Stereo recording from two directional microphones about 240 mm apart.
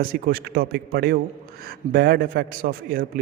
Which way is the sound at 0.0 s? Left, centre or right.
Right.